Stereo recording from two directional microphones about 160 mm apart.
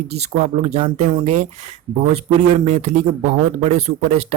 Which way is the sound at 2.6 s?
45° right (ahead or behind).